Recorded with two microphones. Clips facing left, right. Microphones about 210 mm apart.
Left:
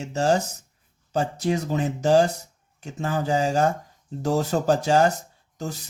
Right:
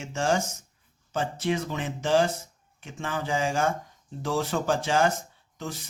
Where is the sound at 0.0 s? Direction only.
40° left (ahead or behind).